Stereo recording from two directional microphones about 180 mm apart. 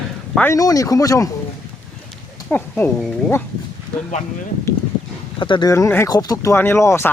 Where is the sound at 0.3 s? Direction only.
15° left (ahead or behind).